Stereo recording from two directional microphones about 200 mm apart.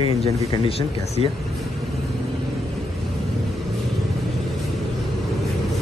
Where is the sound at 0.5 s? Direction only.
30° left (ahead or behind).